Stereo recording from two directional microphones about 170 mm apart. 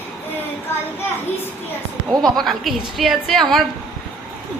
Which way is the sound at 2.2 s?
Centre (ahead or behind).